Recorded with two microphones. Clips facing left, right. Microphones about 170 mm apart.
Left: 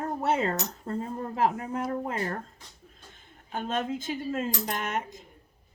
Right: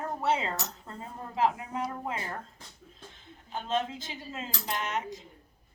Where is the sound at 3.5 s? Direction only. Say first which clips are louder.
Left 1 dB; 50° left (ahead or behind).